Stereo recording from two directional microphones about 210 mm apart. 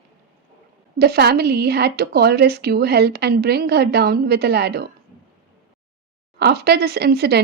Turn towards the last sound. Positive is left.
turn(degrees=-50)  # may be behind; listen again after turning